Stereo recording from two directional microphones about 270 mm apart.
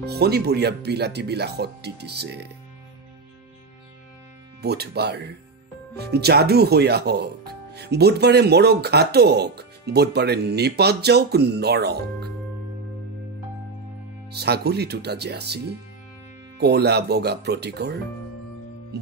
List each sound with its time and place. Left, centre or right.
0.0 s speech: right
4.6 s speech: right
14.3 s speech: right